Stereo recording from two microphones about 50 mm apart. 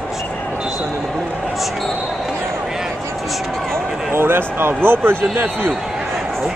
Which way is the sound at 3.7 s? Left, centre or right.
Right.